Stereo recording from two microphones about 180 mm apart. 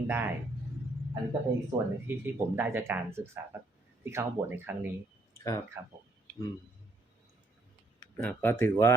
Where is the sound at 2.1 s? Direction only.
15° right (ahead or behind).